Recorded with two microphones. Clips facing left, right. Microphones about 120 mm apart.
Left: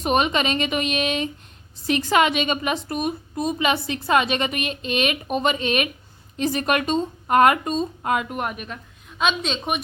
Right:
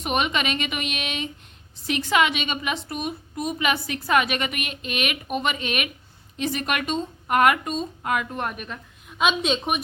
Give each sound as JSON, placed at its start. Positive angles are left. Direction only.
{"t": 0.0, "sound": "a woman's voice", "side_deg": 35}
{"t": 3.4, "sound": "a woman's voice", "side_deg": 30}
{"t": 8.3, "sound": "a woman's voice", "side_deg": 10}